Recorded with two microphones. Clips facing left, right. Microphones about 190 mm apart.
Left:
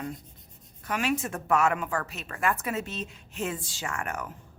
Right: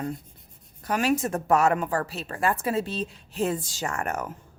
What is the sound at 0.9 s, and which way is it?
A woman's voice, 40° right (ahead or behind).